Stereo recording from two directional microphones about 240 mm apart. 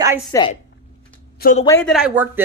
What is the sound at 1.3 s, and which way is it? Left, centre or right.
Speech, left.